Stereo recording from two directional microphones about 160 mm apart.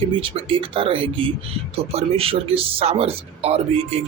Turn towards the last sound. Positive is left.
turn(degrees=-40)  # may be behind; listen again after turning